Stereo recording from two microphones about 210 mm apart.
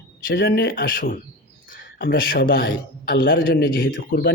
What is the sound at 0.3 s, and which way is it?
A man's voice, 50° left (ahead or behind).